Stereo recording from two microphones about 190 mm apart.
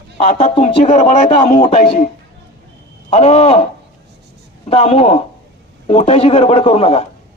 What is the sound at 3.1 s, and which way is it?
Speech, 35° left (ahead or behind).